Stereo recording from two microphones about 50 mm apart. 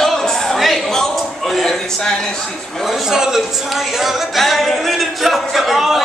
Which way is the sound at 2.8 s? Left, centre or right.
Centre.